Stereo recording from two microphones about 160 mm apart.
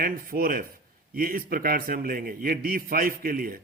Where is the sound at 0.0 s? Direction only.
65° right (ahead or behind).